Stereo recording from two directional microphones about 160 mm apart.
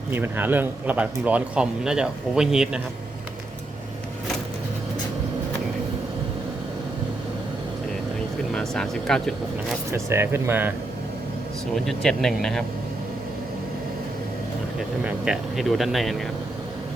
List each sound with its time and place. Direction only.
0.1 s speech: 10° right (ahead or behind)
8.5 s speech: 5° left (ahead or behind)
9.9 s speech: 15° right (ahead or behind)
11.7 s speech: centre (ahead or behind)
15.0 s speech: 5° right (ahead or behind)